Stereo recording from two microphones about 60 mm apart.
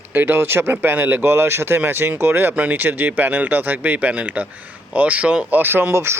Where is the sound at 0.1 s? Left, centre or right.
Right.